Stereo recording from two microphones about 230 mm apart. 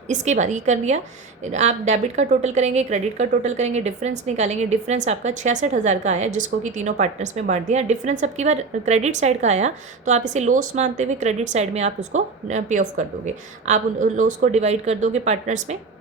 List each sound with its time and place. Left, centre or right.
0.1 s a woman's voice: right